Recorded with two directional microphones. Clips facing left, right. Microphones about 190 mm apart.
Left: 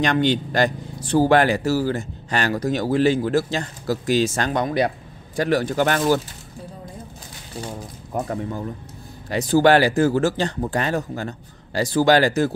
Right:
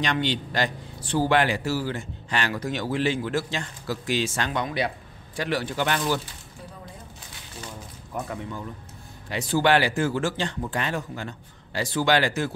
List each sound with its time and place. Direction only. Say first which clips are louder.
0.0 s a man's voice: left 7 dB; 45° left (ahead or behind)
7.6 s a man's voice: left 6 dB; 40° left (ahead or behind)